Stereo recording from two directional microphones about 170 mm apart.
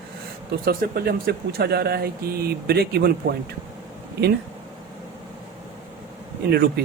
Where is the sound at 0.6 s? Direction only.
65° right (ahead or behind).